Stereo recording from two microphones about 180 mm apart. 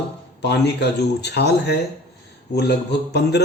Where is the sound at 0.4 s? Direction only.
70° left (ahead or behind).